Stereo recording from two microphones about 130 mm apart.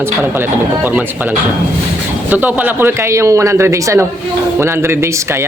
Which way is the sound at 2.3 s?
10° right (ahead or behind).